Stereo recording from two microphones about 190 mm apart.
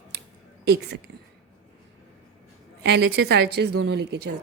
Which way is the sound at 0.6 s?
60° right (ahead or behind).